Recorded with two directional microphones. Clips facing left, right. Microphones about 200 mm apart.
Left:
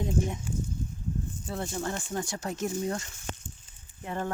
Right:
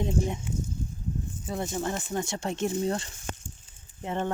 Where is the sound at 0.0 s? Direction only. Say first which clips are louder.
Right 1 dB; 25° right (ahead or behind).